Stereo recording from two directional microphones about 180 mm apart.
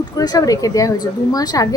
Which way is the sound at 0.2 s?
20° left (ahead or behind).